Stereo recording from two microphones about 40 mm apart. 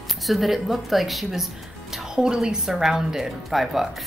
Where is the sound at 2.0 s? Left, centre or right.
Centre.